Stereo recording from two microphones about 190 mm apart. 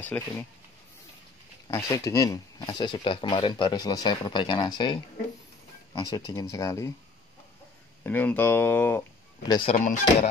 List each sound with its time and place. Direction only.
0.0 s speech: 10° left (ahead or behind)
1.7 s speech: 15° left (ahead or behind)
8.0 s speech: 10° left (ahead or behind)
9.5 s speech: 25° left (ahead or behind)